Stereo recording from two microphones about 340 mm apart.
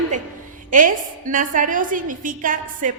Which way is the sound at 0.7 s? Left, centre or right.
Right.